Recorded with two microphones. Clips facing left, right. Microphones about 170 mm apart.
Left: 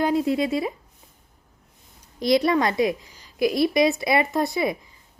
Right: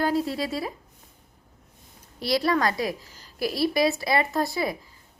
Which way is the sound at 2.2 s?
20° left (ahead or behind).